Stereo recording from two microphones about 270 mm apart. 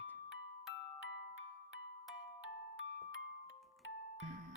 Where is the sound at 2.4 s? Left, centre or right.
Left.